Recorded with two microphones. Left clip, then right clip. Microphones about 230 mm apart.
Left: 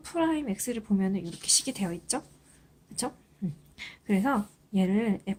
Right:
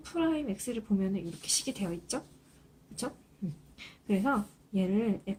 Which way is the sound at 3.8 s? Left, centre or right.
Left.